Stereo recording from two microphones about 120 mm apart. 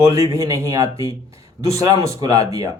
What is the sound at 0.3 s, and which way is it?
A man's voice, 25° right (ahead or behind).